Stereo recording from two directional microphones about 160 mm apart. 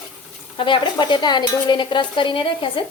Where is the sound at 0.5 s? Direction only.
30° left (ahead or behind).